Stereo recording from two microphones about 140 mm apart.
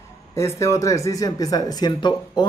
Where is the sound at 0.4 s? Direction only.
20° left (ahead or behind).